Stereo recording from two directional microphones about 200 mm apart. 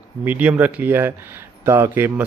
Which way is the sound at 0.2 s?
10° right (ahead or behind).